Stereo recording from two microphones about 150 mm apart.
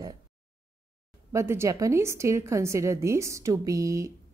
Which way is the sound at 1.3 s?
15° right (ahead or behind).